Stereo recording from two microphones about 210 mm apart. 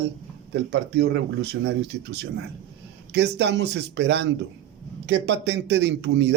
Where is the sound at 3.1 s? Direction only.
50° right (ahead or behind).